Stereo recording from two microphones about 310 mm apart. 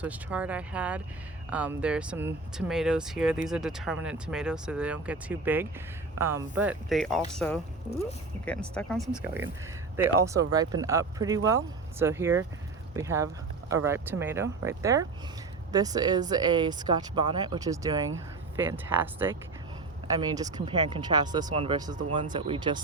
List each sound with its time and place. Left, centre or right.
0.0 s speech: centre